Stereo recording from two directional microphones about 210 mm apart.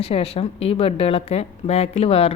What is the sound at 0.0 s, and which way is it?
Speech, 25° left (ahead or behind).